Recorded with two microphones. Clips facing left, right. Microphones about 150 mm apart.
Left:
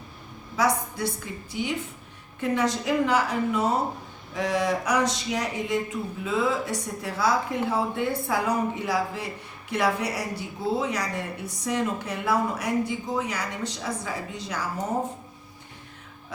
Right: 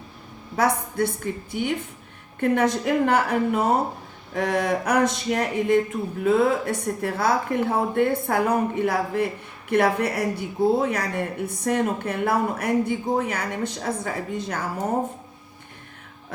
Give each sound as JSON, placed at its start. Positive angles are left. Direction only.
{"t": 0.5, "sound": "speech", "side_deg": -55}